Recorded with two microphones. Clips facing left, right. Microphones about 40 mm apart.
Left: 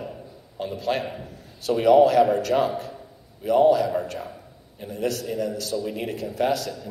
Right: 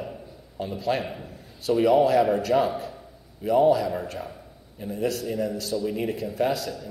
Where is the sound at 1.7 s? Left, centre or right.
Centre.